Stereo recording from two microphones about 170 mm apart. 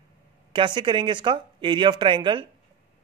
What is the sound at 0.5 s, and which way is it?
Speech, 30° right (ahead or behind).